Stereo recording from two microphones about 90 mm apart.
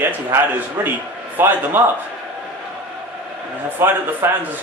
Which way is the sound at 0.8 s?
25° right (ahead or behind).